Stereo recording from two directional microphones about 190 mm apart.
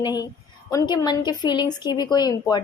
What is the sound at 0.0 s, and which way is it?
A woman's voice, 20° left (ahead or behind).